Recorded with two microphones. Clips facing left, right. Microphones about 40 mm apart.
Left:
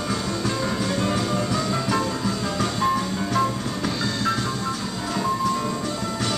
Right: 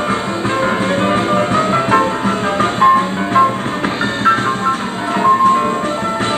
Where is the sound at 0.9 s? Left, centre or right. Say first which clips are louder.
Right 9 dB; right.